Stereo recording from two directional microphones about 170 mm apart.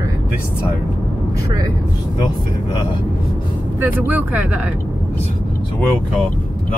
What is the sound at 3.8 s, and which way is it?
Speech, 10° right (ahead or behind).